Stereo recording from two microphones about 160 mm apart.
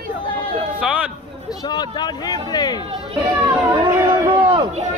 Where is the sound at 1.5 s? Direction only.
25° left (ahead or behind).